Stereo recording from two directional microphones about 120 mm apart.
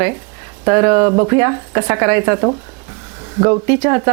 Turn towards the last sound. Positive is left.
turn(degrees=-20)  # may be behind; listen again after turning